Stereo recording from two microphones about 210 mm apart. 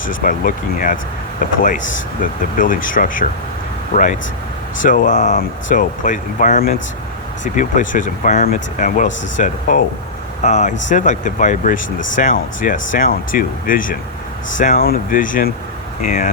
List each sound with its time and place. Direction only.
0.0 s speech: 40° left (ahead or behind)